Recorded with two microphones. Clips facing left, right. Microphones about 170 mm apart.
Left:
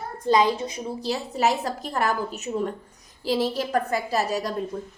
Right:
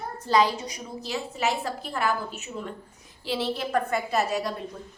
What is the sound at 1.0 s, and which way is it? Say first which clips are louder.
A woman's voice: left 5 dB; 35° left (ahead or behind).